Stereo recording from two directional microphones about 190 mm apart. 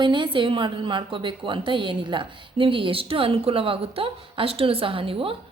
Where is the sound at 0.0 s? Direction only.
25° right (ahead or behind).